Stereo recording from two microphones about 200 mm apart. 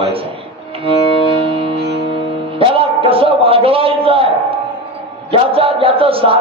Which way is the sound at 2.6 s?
25° right (ahead or behind).